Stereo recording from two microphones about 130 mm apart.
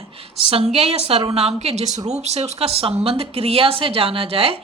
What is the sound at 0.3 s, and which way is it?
Speech, 50° right (ahead or behind).